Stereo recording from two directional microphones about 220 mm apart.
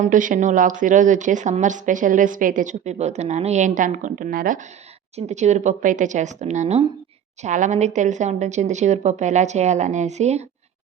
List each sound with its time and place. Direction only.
0.0 s a woman's voice: 35° right (ahead or behind)